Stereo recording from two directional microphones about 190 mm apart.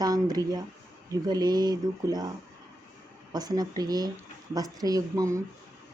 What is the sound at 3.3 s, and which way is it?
Speech, 20° right (ahead or behind).